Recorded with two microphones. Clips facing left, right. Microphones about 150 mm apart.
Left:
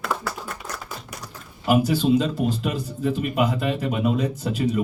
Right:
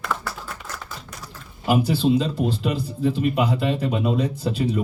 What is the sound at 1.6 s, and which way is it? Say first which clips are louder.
Speech: even; 35° right (ahead or behind).